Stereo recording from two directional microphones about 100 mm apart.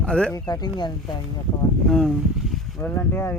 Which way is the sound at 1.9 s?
5° left (ahead or behind).